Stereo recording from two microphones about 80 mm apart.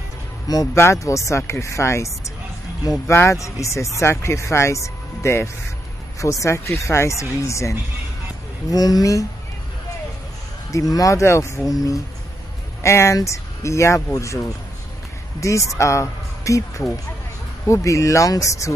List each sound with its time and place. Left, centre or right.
0.5 s speech: left
1.0 s speech: left
8.6 s speech: left
10.7 s speech: left
12.8 s speech: left
15.4 s speech: left